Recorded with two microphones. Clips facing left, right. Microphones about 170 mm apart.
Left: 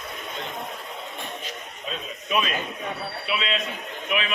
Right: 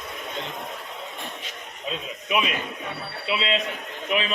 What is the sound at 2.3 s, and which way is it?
Speech, 15° right (ahead or behind).